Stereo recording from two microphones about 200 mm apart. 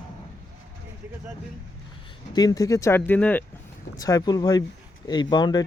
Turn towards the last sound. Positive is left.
turn(degrees=20)  # may be behind; listen again after turning